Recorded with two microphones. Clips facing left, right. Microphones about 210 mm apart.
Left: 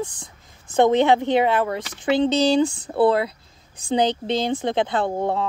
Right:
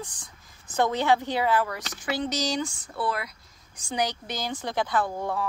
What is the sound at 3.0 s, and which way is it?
A woman's voice, 25° left (ahead or behind).